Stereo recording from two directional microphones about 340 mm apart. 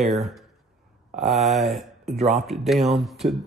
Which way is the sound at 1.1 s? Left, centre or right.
Centre.